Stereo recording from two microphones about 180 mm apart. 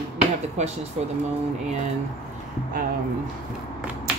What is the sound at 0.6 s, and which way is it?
Speech, 40° right (ahead or behind).